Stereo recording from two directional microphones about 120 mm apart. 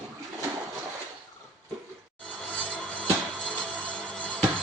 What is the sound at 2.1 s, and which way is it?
Music, 10° left (ahead or behind).